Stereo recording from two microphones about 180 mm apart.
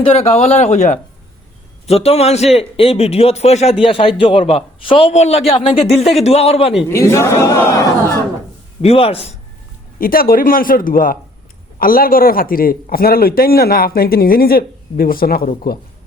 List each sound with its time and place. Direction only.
0.0 s a man's voice: 35° left (ahead or behind)
6.9 s a man's voice: 15° left (ahead or behind)
8.8 s a man's voice: 35° left (ahead or behind)
10.0 s a man's voice: 55° left (ahead or behind)